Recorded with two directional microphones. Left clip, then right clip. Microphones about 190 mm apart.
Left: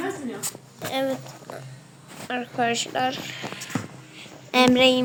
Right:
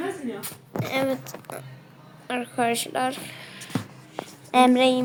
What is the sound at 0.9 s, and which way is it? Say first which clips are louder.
Speech: even; 10° right (ahead or behind).